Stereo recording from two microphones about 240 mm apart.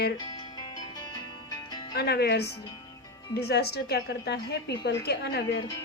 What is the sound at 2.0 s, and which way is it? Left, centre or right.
A woman's voice, left.